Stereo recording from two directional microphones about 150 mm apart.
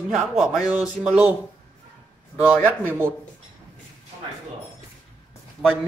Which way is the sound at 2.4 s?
15° right (ahead or behind).